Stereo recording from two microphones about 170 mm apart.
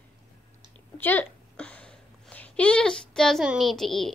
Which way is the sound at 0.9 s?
10° left (ahead or behind).